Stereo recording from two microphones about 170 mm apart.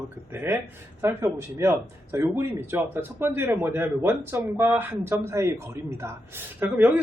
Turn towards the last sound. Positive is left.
turn(degrees=-10)  # may be behind; listen again after turning